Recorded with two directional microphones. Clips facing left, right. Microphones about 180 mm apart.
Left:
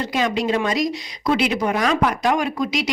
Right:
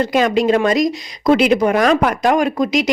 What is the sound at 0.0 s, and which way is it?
Speech, 50° right (ahead or behind).